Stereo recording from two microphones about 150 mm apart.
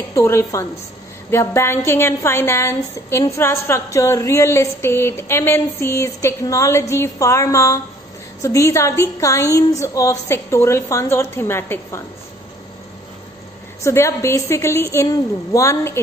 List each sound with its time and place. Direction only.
0.1 s a woman's voice: 20° left (ahead or behind)
13.8 s a woman's voice: 20° left (ahead or behind)